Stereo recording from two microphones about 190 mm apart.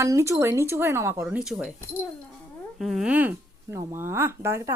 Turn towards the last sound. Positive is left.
turn(degrees=-15)  # may be behind; listen again after turning